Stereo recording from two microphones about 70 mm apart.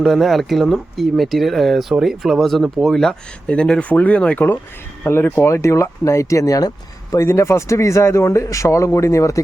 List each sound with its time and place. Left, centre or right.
0.0 s speech: centre
5.0 s speech: left
5.6 s speech: left
7.2 s speech: left